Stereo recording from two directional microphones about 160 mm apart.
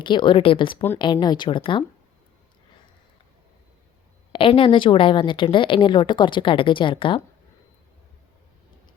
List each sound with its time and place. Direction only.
0.0 s a woman's voice: 30° left (ahead or behind)
4.3 s a woman's voice: 35° left (ahead or behind)